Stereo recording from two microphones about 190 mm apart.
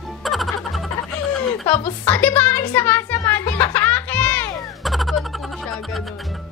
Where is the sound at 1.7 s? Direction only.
10° left (ahead or behind).